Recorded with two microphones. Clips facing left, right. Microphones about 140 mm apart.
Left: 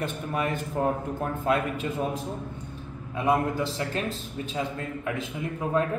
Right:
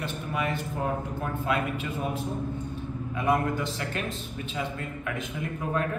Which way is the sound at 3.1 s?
30° left (ahead or behind).